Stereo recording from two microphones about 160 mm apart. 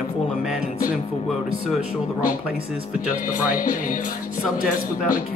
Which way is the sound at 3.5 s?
60° left (ahead or behind).